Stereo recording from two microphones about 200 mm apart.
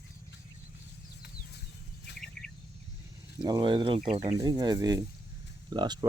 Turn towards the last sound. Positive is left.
turn(degrees=-20)  # may be behind; listen again after turning